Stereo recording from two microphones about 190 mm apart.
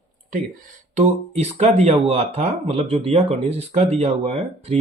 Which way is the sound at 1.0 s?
35° right (ahead or behind).